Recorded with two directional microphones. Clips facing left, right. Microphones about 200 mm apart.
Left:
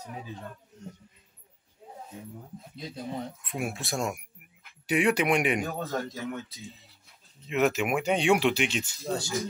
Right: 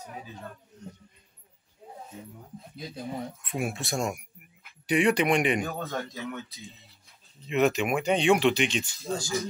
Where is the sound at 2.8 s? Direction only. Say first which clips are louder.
Even; 5° right (ahead or behind).